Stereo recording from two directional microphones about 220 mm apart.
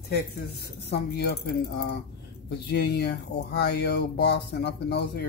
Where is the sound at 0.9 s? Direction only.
45° left (ahead or behind).